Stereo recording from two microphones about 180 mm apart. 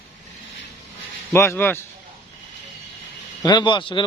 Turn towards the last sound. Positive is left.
turn(degrees=25)  # may be behind; listen again after turning